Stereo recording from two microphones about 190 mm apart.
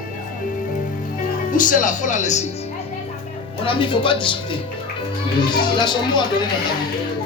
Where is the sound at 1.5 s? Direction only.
45° left (ahead or behind).